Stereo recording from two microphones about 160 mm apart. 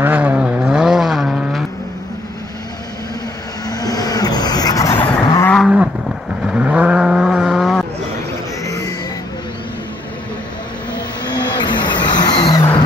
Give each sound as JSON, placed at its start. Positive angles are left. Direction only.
{"t": 0.0, "sound": "vehicle", "side_deg": -10}
{"t": 3.6, "sound": "vehicle", "side_deg": 25}
{"t": 5.6, "sound": "roaring cats", "side_deg": -5}
{"t": 6.4, "sound": "vehicle", "side_deg": -5}
{"t": 8.6, "sound": "music", "side_deg": 20}
{"t": 11.0, "sound": "vehicle", "side_deg": 25}